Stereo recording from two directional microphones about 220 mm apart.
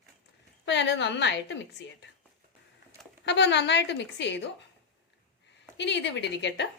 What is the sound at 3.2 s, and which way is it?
A woman's voice, 55° left (ahead or behind).